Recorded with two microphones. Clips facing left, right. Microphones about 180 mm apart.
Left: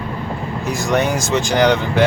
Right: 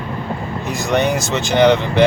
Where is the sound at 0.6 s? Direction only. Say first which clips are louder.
Right 1 dB; centre (ahead or behind).